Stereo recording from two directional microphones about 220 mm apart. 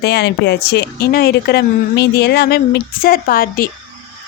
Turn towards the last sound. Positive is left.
turn(degrees=40)  # may be behind; listen again after turning